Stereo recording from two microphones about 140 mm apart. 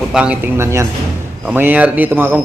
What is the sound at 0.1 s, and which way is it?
A man's voice, 10° right (ahead or behind).